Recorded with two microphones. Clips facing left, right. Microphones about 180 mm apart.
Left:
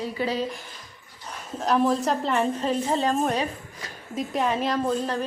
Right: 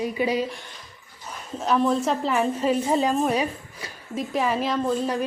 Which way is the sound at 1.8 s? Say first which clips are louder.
Right 1 dB; centre (ahead or behind).